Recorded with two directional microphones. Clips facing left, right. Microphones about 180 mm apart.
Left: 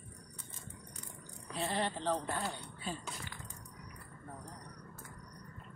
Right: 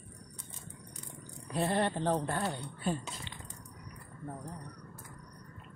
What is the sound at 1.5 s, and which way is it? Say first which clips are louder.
Speech: right 5 dB; 55° right (ahead or behind).